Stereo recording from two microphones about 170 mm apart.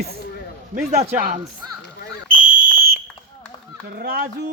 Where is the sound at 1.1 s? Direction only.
55° right (ahead or behind).